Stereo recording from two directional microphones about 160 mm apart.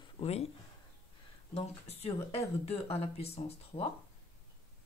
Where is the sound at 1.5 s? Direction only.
40° left (ahead or behind).